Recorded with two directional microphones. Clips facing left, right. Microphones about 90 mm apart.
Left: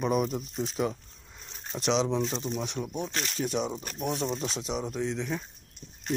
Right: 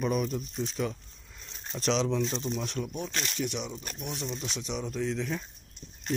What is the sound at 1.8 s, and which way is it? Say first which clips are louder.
Speech: left 1 dB; 20° left (ahead or behind).